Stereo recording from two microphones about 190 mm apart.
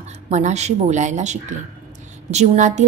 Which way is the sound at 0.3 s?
35° right (ahead or behind).